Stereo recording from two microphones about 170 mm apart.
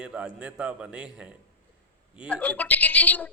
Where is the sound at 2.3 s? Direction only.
10° left (ahead or behind).